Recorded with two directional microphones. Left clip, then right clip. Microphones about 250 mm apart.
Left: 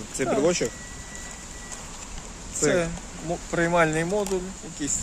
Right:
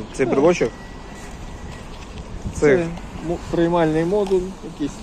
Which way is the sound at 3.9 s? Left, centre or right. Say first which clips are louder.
Right 6 dB; left.